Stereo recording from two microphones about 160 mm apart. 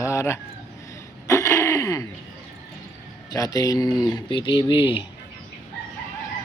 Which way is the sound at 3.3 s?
20° left (ahead or behind).